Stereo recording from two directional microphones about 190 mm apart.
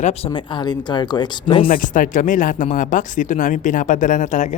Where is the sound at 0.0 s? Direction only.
30° left (ahead or behind).